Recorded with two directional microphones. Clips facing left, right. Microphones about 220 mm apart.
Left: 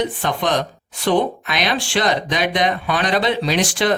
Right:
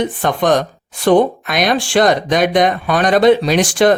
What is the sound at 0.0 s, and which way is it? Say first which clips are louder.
Speech: right 5 dB; 50° right (ahead or behind).